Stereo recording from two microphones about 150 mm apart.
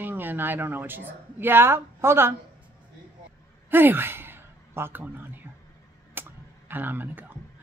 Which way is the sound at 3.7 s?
15° right (ahead or behind).